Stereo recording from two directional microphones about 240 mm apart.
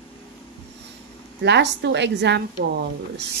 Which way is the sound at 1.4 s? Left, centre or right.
Right.